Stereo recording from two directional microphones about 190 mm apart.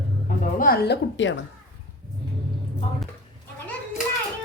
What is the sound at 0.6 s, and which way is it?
Speech, 55° left (ahead or behind).